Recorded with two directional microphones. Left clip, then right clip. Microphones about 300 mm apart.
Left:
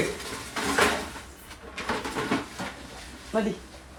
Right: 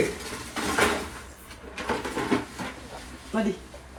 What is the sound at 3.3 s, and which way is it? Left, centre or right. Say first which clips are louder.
Speech: left 1 dB; left.